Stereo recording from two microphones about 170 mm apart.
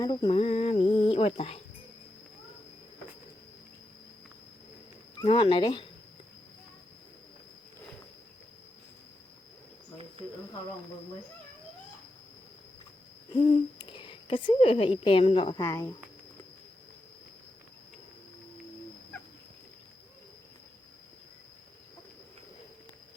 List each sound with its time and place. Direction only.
0.0 s speech: 25° left (ahead or behind)
5.2 s speech: 30° left (ahead or behind)
13.3 s a woman's voice: 30° left (ahead or behind)
15.5 s speech: 20° left (ahead or behind)